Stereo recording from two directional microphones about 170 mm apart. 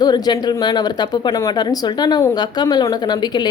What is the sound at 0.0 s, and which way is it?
Speech, 25° left (ahead or behind).